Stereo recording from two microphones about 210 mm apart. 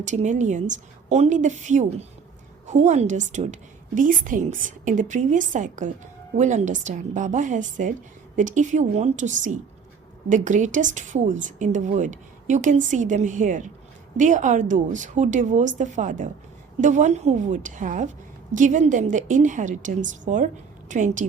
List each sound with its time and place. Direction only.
0.0 s a woman's voice: 35° right (ahead or behind)